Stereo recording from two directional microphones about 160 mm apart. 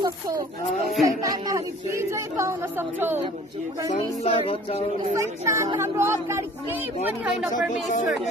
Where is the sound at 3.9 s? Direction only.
40° left (ahead or behind).